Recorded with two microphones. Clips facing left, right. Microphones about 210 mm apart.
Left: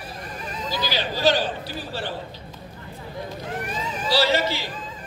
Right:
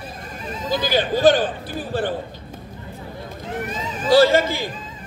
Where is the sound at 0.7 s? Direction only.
50° right (ahead or behind).